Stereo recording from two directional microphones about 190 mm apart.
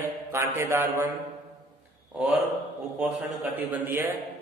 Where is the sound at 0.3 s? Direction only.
15° right (ahead or behind).